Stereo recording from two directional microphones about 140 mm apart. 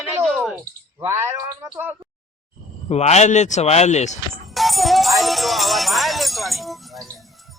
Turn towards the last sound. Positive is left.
turn(degrees=0)  # may be behind; listen again after turning